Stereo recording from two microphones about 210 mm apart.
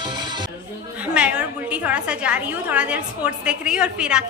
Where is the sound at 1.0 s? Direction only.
5° right (ahead or behind).